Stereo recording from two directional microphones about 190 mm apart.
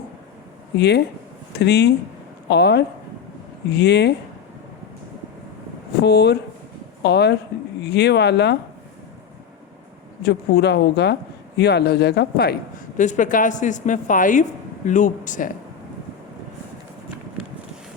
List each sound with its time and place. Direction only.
0.8 s speech: 60° left (ahead or behind)
6.0 s speech: 60° left (ahead or behind)
10.2 s speech: 60° left (ahead or behind)
13.0 s a woman's voice: 40° left (ahead or behind)